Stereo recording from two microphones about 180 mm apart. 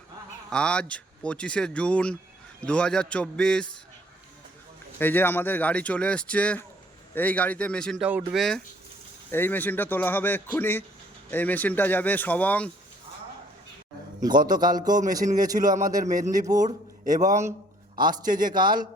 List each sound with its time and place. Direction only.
0.5 s speech: 5° left (ahead or behind)
4.9 s speech: 10° left (ahead or behind)
14.2 s a man's voice: 20° right (ahead or behind)
17.2 s a man's voice: 40° right (ahead or behind)